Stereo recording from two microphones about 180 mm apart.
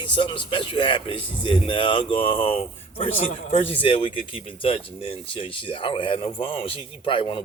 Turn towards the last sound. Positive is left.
turn(degrees=30)  # may be behind; listen again after turning